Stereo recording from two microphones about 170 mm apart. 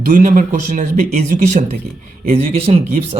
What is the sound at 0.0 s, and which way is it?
Speech, 45° right (ahead or behind).